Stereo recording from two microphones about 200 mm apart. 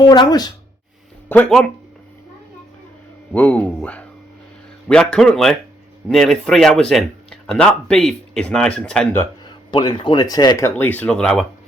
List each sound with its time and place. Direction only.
0.0 s speech: 20° left (ahead or behind)
1.3 s speech: 5° left (ahead or behind)
3.3 s speech: 5° left (ahead or behind)
9.7 s speech: 25° left (ahead or behind)
10.8 s speech: 10° left (ahead or behind)